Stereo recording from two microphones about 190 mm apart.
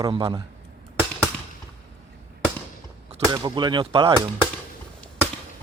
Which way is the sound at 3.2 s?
20° right (ahead or behind).